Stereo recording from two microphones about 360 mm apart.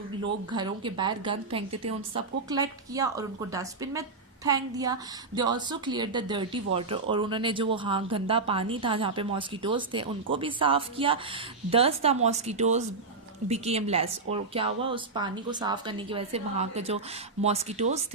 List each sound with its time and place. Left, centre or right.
0.5 s speech: centre